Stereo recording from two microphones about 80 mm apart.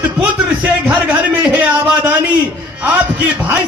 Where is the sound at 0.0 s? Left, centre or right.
Centre.